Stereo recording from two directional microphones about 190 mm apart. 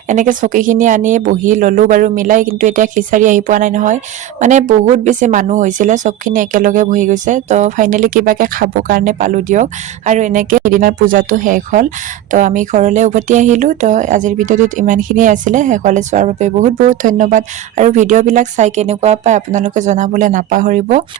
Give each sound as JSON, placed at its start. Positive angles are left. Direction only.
{"t": 0.1, "sound": "speech", "side_deg": -40}